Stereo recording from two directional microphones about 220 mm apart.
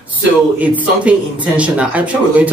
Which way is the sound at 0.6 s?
5° right (ahead or behind).